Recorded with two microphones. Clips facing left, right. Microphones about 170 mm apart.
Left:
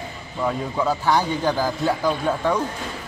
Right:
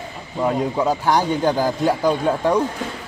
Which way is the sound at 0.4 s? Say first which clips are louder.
Right 4 dB; 20° right (ahead or behind).